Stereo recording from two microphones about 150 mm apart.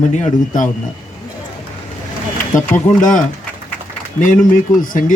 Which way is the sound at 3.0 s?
60° left (ahead or behind).